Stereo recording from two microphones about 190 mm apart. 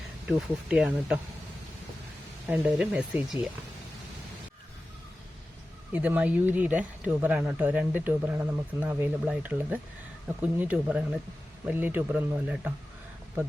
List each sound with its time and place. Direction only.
0.3 s speech: 5° right (ahead or behind)
2.5 s speech: 5° right (ahead or behind)
5.9 s speech: 10° right (ahead or behind)